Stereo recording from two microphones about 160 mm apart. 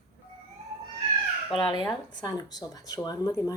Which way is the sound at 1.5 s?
30° left (ahead or behind).